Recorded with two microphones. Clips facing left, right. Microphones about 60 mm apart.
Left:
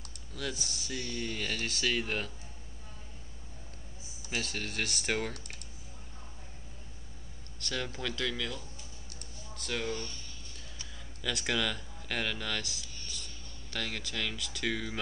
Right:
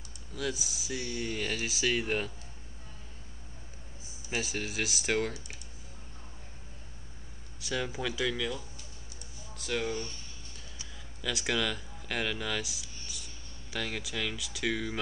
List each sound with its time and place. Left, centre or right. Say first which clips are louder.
0.3 s speech: right 3 dB; centre
4.3 s speech: right 2 dB; centre
7.5 s speech: right 3 dB; centre
9.8 s speech: right 2 dB; right
11.1 s speech: right 1 dB; centre